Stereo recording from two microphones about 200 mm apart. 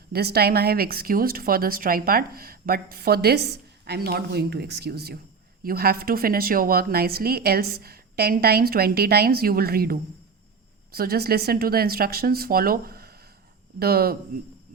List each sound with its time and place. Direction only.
0.1 s a woman's voice: 50° right (ahead or behind)